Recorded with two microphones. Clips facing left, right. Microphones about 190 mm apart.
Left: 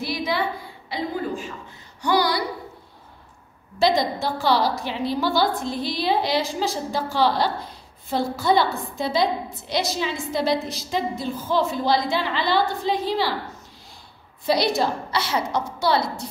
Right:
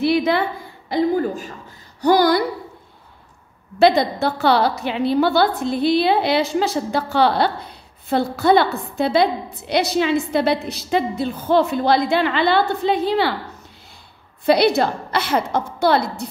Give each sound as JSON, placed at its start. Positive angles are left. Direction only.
{"t": 0.0, "sound": "a woman's voice", "side_deg": -60}
{"t": 2.0, "sound": "a sound", "side_deg": -45}
{"t": 3.8, "sound": "a woman's voice", "side_deg": -60}
{"t": 14.4, "sound": "a woman's voice", "side_deg": -60}